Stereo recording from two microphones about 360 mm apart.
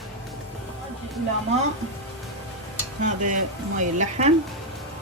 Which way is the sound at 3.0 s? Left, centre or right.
Right.